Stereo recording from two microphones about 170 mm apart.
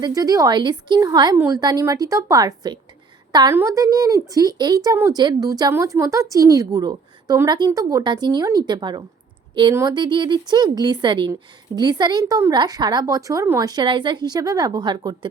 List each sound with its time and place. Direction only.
0.0 s a woman's voice: 20° right (ahead or behind)